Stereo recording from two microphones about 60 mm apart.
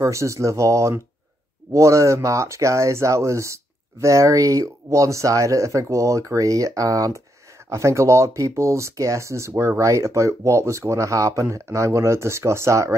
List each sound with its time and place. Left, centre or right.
0.0 s speech: right
7.7 s speech: right